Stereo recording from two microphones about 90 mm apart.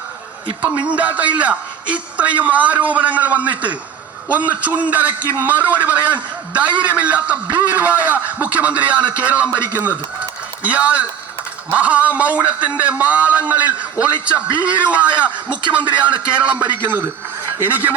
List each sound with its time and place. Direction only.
0.9 s a man's voice: 15° right (ahead or behind)
10.6 s a man's voice: 15° right (ahead or behind)